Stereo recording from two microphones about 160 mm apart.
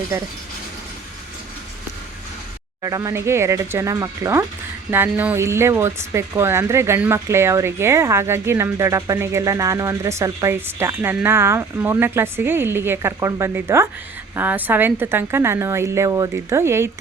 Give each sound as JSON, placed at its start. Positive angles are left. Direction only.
{"t": 2.8, "sound": "speech", "side_deg": -20}